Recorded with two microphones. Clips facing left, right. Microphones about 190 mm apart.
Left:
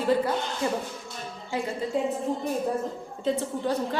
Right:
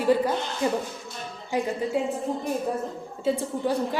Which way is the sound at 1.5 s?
15° right (ahead or behind).